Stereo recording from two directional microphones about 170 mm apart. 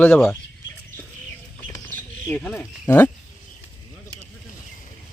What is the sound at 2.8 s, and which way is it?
Speech, 10° left (ahead or behind).